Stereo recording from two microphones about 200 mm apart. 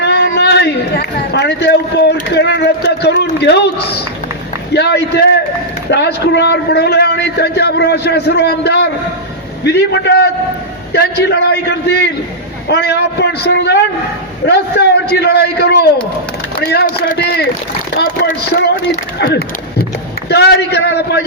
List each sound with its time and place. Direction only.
0.0 s run: 55° left (ahead or behind)
2.3 s a man's voice: 60° left (ahead or behind)